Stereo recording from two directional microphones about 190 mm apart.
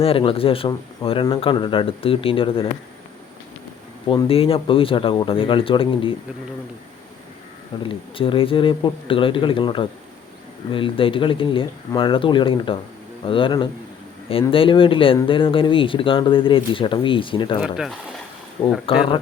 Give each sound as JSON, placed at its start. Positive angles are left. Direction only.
{"t": 0.0, "sound": "speech", "side_deg": 30}
{"t": 4.1, "sound": "speech", "side_deg": 25}
{"t": 7.8, "sound": "speech", "side_deg": 25}
{"t": 18.6, "sound": "speech", "side_deg": 20}